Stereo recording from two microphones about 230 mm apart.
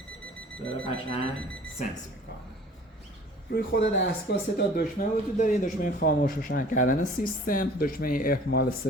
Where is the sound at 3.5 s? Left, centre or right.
Left.